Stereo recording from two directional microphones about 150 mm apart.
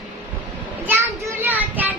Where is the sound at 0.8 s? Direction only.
15° right (ahead or behind).